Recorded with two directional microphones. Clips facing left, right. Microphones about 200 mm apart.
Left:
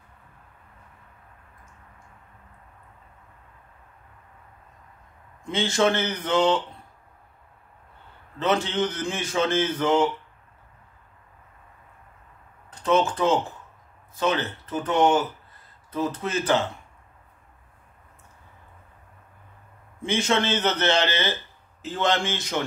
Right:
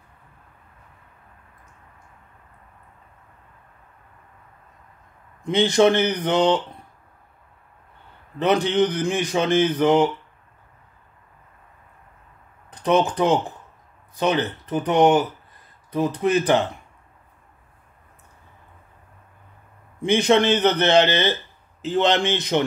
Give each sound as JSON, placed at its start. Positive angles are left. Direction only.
{"t": 5.4, "sound": "a man's voice", "side_deg": -20}
{"t": 8.4, "sound": "a man's voice", "side_deg": -15}
{"t": 12.6, "sound": "a man's voice", "side_deg": -15}
{"t": 20.0, "sound": "a man's voice", "side_deg": -15}